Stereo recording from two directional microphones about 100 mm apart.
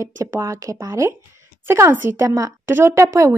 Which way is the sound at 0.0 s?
30° right (ahead or behind).